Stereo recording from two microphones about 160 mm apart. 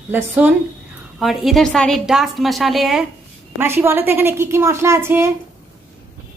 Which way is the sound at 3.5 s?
15° right (ahead or behind).